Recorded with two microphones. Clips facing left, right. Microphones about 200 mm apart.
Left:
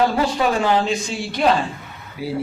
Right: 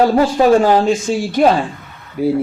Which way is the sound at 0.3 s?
45° right (ahead or behind).